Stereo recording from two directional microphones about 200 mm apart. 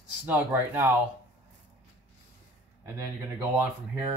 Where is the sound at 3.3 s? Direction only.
15° right (ahead or behind).